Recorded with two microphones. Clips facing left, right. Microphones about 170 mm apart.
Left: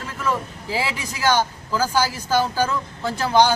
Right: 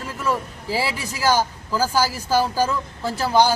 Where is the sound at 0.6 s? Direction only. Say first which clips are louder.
Right 2 dB; 40° right (ahead or behind).